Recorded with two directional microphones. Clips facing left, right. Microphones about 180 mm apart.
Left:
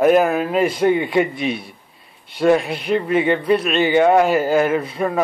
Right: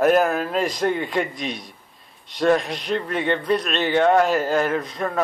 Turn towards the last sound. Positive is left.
turn(degrees=10)  # may be behind; listen again after turning